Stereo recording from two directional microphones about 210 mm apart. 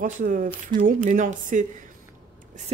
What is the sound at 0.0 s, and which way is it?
Speech, 40° right (ahead or behind).